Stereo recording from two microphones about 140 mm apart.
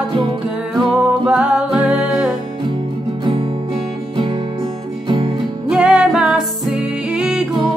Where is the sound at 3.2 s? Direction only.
40° right (ahead or behind).